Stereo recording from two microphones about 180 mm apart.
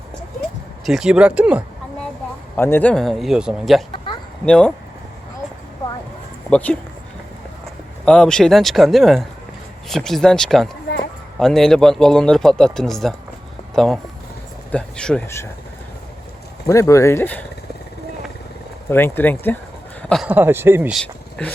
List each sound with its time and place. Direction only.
0.9 s speech: 5° right (ahead or behind)
2.6 s speech: 10° left (ahead or behind)
3.9 s a sound: 25° left (ahead or behind)
4.4 s speech: 5° left (ahead or behind)
6.5 s speech: 10° left (ahead or behind)
8.0 s speech: 5° left (ahead or behind)
16.6 s speech: 15° left (ahead or behind)
18.9 s speech: 10° left (ahead or behind)
20.0 s a sound: 5° left (ahead or behind)
20.2 s speech: 10° right (ahead or behind)
20.9 s speech: 5° left (ahead or behind)